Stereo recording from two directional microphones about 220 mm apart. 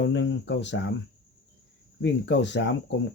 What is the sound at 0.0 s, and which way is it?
Speech, 55° left (ahead or behind).